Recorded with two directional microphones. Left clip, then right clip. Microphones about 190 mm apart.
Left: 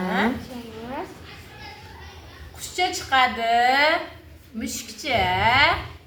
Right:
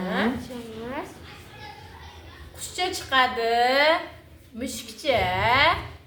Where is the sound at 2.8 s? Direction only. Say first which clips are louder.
Left 2 dB; 10° right (ahead or behind).